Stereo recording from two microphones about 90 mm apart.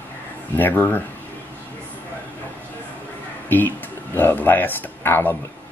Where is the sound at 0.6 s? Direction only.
20° left (ahead or behind).